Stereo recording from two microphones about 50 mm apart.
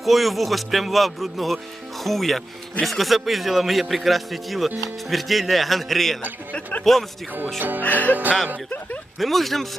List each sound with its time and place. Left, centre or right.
0.0 s a man's voice: centre
6.5 s a man's voice: left
8.1 s music: right
9.1 s a man's voice: centre